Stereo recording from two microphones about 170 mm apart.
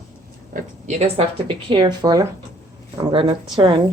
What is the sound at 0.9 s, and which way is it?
Speech, 40° right (ahead or behind).